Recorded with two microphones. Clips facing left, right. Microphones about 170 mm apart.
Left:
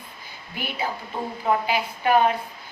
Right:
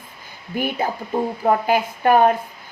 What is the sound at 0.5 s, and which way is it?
Speech, 50° right (ahead or behind).